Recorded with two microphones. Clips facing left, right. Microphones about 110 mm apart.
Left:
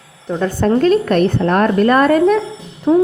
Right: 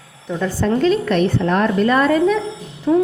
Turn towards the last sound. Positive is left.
turn(degrees=30)  # may be behind; listen again after turning